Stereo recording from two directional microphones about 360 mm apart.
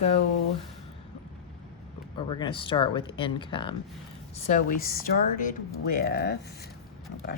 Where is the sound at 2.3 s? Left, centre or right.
Centre.